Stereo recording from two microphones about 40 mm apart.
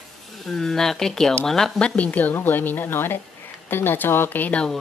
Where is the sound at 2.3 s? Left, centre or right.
Left.